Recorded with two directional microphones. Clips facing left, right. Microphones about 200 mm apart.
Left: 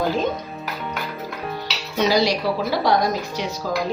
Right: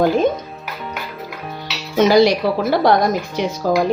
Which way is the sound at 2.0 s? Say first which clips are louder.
Right 7 dB; 55° right (ahead or behind).